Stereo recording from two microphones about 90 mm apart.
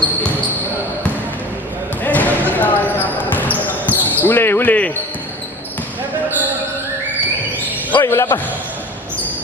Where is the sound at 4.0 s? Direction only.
20° left (ahead or behind).